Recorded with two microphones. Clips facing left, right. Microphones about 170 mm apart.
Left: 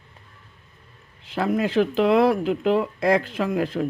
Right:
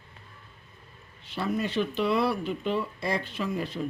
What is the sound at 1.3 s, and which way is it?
Speech, 90° left.